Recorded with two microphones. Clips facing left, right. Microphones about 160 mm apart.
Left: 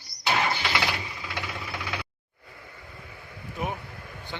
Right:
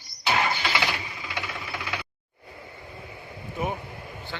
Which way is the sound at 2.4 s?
25° right (ahead or behind).